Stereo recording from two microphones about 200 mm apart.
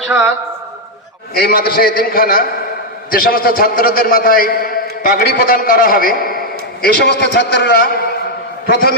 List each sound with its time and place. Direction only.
0.1 s a man's voice: 5° right (ahead or behind)
1.3 s a man's voice: 50° left (ahead or behind)